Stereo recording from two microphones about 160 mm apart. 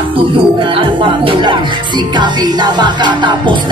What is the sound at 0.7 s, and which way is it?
Music, 30° right (ahead or behind).